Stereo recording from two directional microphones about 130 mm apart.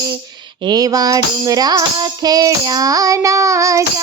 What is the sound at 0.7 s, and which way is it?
Tambourine, 30° right (ahead or behind).